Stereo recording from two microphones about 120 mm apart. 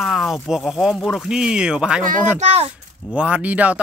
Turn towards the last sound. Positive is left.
turn(degrees=-10)  # may be behind; listen again after turning